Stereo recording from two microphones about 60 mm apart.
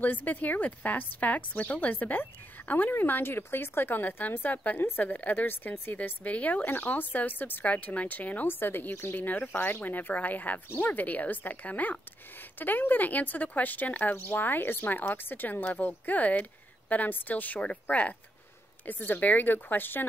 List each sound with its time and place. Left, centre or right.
0.0 s a woman's voice: left